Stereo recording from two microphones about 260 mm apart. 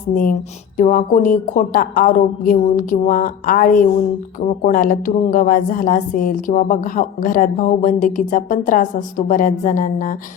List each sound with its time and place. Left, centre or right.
0.1 s a woman's voice: left